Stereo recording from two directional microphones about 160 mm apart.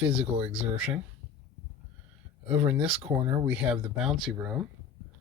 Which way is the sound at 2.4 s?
35° right (ahead or behind).